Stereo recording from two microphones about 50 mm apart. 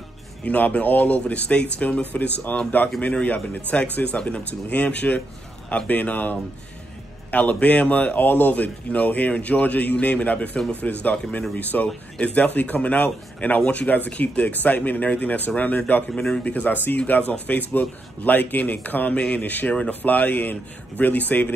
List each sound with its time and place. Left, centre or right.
0.5 s speech: left
5.9 s speech: left
16.1 s a man's voice: centre
16.6 s speech: left